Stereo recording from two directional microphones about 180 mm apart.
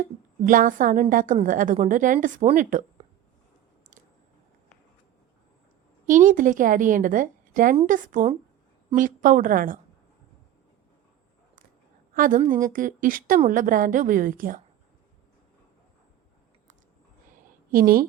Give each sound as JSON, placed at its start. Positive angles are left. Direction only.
{"t": 0.4, "sound": "a woman's voice", "side_deg": -50}
{"t": 6.1, "sound": "a woman's voice", "side_deg": -45}
{"t": 12.1, "sound": "a woman's voice", "side_deg": -50}
{"t": 17.3, "sound": "a sound", "side_deg": -55}